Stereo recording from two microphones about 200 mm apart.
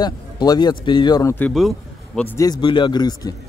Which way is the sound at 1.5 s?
Centre (ahead or behind).